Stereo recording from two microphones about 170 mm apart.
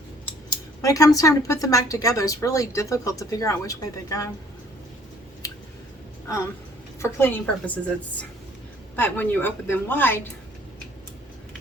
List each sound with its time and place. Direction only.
0.8 s a woman's voice: 20° left (ahead or behind)
5.4 s a sound: 20° left (ahead or behind)
6.2 s a woman's voice: 20° left (ahead or behind)